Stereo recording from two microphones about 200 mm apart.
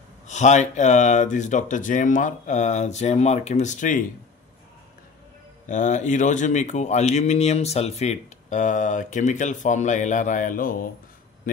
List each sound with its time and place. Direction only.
0.3 s speech: 35° left (ahead or behind)
5.7 s speech: 40° left (ahead or behind)